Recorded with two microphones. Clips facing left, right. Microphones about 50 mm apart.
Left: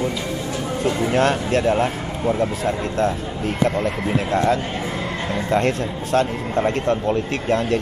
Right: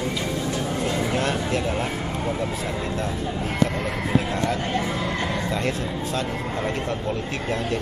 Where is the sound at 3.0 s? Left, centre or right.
Left.